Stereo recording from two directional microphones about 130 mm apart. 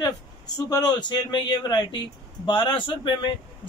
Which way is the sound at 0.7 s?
30° left (ahead or behind).